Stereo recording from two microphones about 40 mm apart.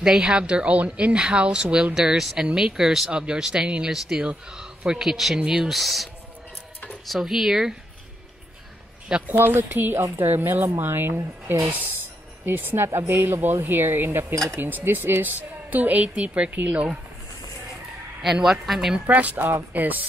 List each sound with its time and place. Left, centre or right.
0.0 s speech: centre
2.0 s a man's voice: centre
3.1 s a man's voice: right
3.6 s speech: right
5.0 s a man's voice: centre
7.1 s a man's voice: centre
9.4 s speech: right
14.6 s a woman's voice: right
16.2 s a woman's voice: right
18.2 s a man's voice: centre
19.0 s a woman's voice: right
19.3 s a woman's voice: right